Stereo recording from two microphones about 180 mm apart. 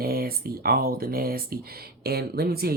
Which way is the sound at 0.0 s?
55° right (ahead or behind).